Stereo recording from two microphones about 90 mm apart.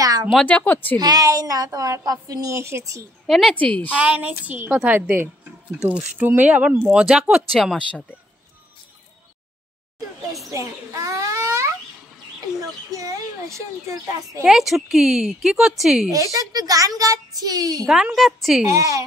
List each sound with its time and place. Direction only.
0.0 s a sound: 40° right (ahead or behind)
0.5 s speech: 20° left (ahead or behind)
0.9 s a woman's voice: 50° right (ahead or behind)
3.3 s a woman's voice: centre (ahead or behind)
3.5 s a woman's voice: 15° left (ahead or behind)
3.9 s speech: 10° right (ahead or behind)
7.5 s a woman's voice: 10° left (ahead or behind)
9.9 s a sound: 35° right (ahead or behind)
12.9 s a sound: 40° right (ahead or behind)
14.4 s a woman's voice: 5° right (ahead or behind)
16.1 s a woman's voice: 35° right (ahead or behind)
17.8 s speech: 10° right (ahead or behind)
18.1 s a woman's voice: centre (ahead or behind)
18.7 s a woman's voice: 35° right (ahead or behind)